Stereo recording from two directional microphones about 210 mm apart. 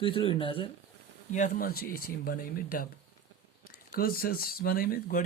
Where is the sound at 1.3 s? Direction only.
40° left (ahead or behind).